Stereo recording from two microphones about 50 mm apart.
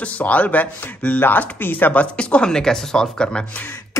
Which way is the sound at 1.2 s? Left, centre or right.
Left.